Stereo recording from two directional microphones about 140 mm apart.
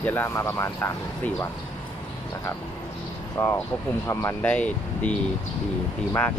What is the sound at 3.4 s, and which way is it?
Speech, 20° left (ahead or behind).